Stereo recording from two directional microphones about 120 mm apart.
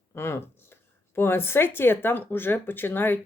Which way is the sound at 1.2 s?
20° left (ahead or behind).